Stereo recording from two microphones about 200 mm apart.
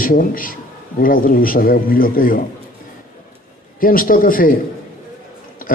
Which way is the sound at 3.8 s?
45° left (ahead or behind).